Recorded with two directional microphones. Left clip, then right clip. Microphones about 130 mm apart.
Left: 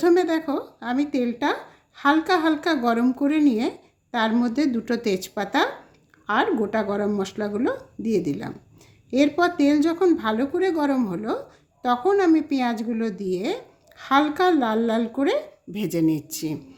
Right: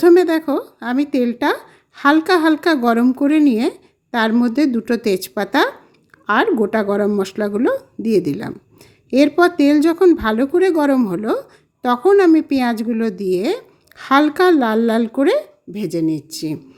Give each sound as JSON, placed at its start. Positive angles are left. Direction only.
{"t": 0.0, "sound": "speech", "side_deg": -50}
{"t": 15.7, "sound": "speech", "side_deg": -25}